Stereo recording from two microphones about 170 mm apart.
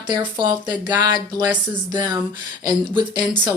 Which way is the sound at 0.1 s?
25° right (ahead or behind).